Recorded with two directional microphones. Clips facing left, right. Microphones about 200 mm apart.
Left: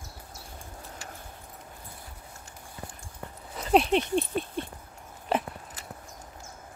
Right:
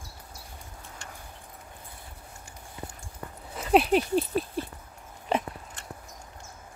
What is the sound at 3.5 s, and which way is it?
Patter, centre (ahead or behind).